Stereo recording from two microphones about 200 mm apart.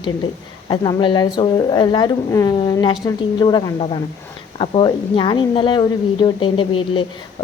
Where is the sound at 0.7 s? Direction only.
25° left (ahead or behind).